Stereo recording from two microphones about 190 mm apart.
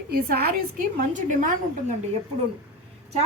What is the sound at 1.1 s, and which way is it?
Speech, 45° right (ahead or behind).